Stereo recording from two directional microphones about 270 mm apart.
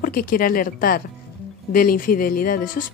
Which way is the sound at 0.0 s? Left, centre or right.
Left.